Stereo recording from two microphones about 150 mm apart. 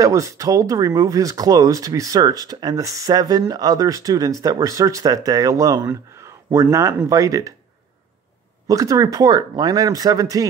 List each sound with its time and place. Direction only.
0.0 s speech: 20° right (ahead or behind)
8.6 s speech: 20° right (ahead or behind)